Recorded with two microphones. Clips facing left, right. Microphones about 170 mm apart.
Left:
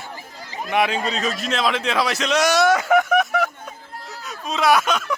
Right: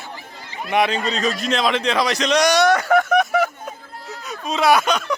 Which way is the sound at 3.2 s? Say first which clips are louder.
Right 2 dB; centre (ahead or behind).